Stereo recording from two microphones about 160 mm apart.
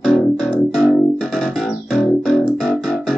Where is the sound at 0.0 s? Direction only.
5° left (ahead or behind).